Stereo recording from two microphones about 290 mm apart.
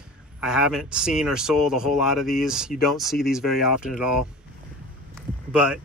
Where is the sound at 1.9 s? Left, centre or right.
Left.